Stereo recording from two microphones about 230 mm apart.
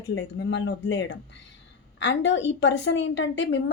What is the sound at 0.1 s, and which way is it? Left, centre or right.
A woman's voice, left.